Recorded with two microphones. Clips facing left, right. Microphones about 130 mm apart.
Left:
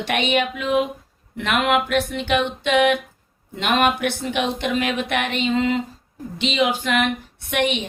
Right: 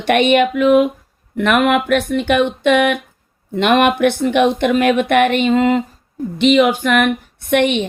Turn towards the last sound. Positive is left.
turn(degrees=-60)  # may be behind; listen again after turning